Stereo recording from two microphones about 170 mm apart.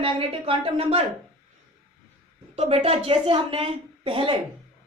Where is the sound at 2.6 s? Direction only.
35° right (ahead or behind).